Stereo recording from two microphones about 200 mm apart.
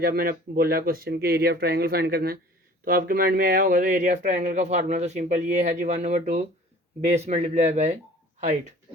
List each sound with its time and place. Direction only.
0.0 s speech: 50° right (ahead or behind)